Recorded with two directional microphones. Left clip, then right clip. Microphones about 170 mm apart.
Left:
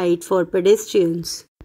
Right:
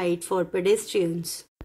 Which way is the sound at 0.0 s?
40° left (ahead or behind).